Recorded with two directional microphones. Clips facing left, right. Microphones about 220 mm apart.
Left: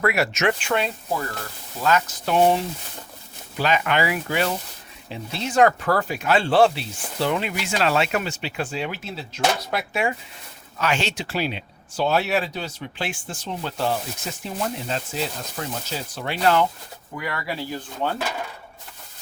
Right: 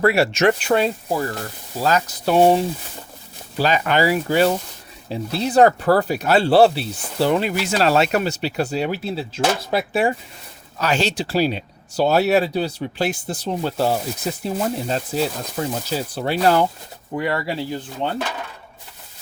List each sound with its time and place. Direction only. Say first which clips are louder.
0.0 s speech: right 5 dB; 30° right (ahead or behind)
3.6 s speech: right 3 dB; 35° right (ahead or behind)